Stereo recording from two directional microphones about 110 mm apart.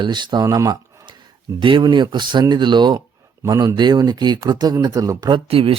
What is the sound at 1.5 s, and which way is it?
Speech, 45° right (ahead or behind).